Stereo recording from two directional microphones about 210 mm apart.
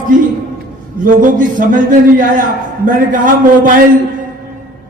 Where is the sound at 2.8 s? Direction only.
40° right (ahead or behind).